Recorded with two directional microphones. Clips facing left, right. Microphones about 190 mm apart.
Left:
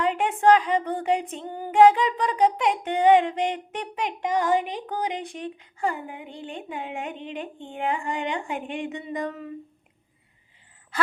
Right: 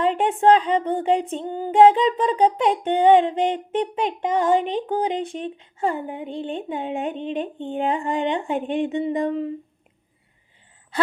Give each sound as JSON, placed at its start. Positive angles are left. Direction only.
{"t": 0.0, "sound": "female singing", "side_deg": -30}